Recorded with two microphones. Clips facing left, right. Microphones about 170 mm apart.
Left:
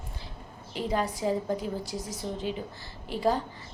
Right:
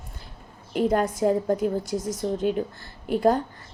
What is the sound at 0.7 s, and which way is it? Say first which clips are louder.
A woman's voice: right 7 dB; 50° right (ahead or behind).